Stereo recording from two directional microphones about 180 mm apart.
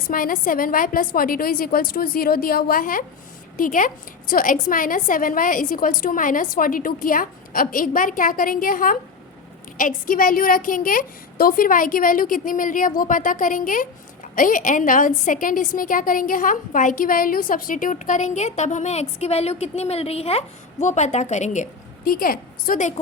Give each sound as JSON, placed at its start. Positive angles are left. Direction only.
{"t": 0.1, "sound": "a woman's voice", "side_deg": 50}